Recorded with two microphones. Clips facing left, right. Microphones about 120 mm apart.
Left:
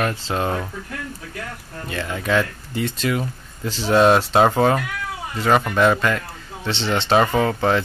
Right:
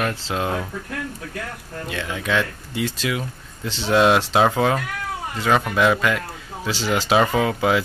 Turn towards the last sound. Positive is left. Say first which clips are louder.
# left 1 dB
turn(degrees=-5)  # may be behind; listen again after turning